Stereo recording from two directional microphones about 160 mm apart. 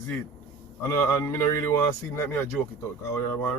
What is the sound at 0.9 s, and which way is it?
Speech, 15° left (ahead or behind).